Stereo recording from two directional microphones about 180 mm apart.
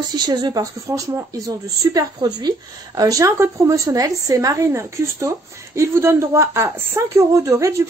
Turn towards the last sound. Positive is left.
turn(degrees=-15)  # may be behind; listen again after turning